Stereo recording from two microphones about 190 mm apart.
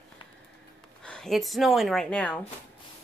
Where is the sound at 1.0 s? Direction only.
5° left (ahead or behind).